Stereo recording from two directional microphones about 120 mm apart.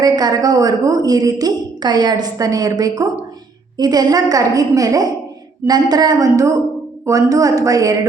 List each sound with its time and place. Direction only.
0.0 s a woman's voice: 35° right (ahead or behind)